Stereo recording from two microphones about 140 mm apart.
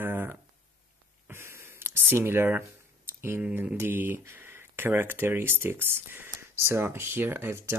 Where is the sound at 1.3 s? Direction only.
20° right (ahead or behind).